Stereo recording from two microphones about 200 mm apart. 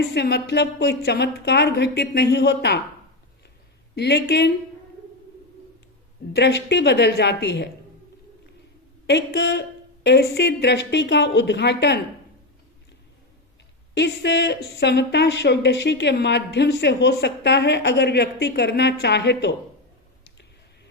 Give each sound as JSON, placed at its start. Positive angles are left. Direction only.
{"t": 0.1, "sound": "speech", "side_deg": 55}
{"t": 3.9, "sound": "speech", "side_deg": 55}
{"t": 6.3, "sound": "speech", "side_deg": 60}
{"t": 9.0, "sound": "speech", "side_deg": 60}
{"t": 13.9, "sound": "speech", "side_deg": 60}